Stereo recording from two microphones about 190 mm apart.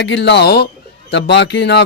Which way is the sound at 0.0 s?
65° left (ahead or behind).